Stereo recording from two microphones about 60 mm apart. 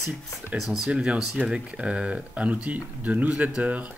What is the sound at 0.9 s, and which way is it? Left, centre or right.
Mantra, centre.